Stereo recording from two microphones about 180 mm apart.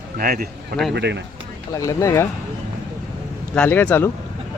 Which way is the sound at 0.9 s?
70° right (ahead or behind).